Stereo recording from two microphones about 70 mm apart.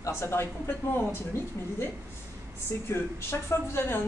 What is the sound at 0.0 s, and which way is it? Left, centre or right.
A woman's voice, left.